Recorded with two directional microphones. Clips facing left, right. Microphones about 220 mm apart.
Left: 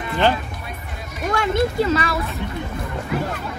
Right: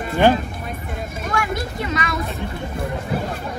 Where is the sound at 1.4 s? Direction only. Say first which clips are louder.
Left 6 dB; 25° left (ahead or behind).